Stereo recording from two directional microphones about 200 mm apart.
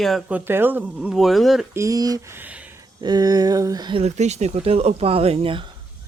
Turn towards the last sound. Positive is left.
turn(degrees=-30)  # may be behind; listen again after turning